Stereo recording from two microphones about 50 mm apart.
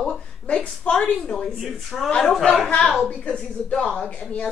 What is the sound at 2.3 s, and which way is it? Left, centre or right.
Speech, centre.